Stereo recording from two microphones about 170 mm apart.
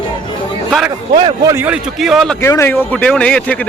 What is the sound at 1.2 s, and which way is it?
Speech, 25° right (ahead or behind).